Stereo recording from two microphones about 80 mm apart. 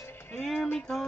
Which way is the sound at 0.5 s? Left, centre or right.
Left.